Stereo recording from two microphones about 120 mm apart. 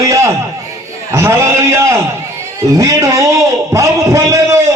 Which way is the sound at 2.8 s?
25° right (ahead or behind).